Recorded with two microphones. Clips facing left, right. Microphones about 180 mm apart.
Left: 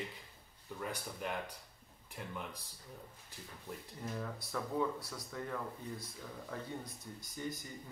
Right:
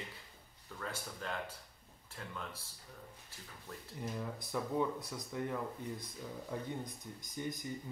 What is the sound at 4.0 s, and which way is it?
Speech, 15° right (ahead or behind).